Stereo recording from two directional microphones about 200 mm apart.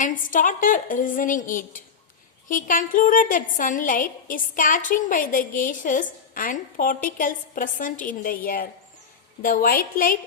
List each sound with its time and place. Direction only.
0.0 s a woman's voice: 40° left (ahead or behind)